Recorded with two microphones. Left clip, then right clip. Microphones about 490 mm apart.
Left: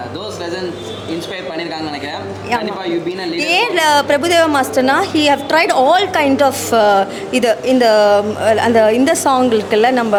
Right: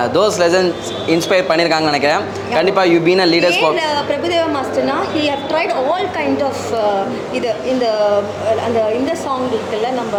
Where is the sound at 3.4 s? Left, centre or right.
Left.